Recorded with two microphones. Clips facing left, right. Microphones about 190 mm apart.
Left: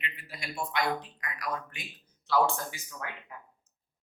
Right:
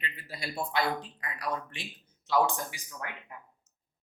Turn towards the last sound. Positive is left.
turn(degrees=-15)  # may be behind; listen again after turning